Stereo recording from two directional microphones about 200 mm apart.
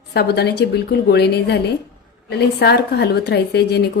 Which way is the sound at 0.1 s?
55° left (ahead or behind).